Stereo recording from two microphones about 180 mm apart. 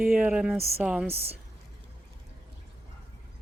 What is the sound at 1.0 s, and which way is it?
Speech, 35° right (ahead or behind).